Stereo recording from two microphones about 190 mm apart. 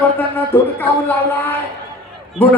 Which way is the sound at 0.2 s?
10° left (ahead or behind).